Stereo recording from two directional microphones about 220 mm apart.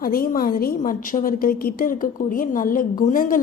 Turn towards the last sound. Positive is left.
turn(degrees=40)  # may be behind; listen again after turning